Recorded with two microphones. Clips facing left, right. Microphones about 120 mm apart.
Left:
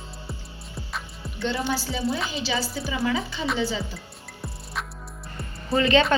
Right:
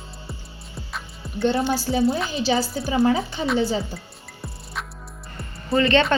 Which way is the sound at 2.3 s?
45° right (ahead or behind).